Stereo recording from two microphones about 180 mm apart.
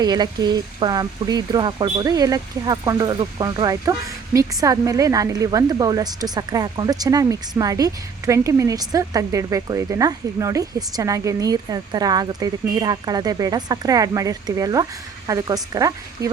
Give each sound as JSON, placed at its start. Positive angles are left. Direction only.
{"t": 0.0, "sound": "speech", "side_deg": -25}